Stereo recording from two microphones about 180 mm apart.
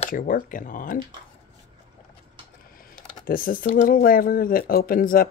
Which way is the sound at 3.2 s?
50° left (ahead or behind).